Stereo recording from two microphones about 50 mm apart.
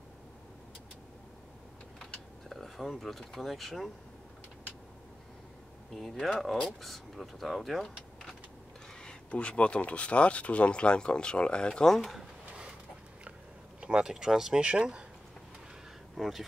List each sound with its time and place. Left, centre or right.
2.5 s speech: centre
5.9 s speech: centre
9.0 s speech: left
13.7 s speech: centre
16.2 s speech: centre